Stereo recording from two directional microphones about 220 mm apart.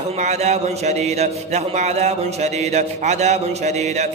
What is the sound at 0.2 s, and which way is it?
A man's voice, 30° right (ahead or behind).